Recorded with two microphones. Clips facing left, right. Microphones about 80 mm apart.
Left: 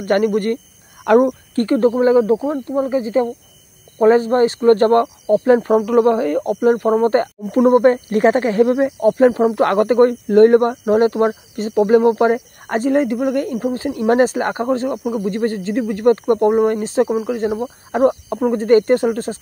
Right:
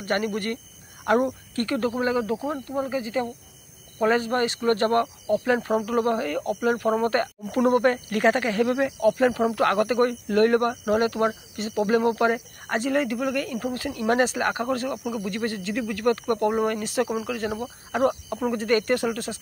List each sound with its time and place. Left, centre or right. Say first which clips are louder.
0.0 s speech: left 10 dB; left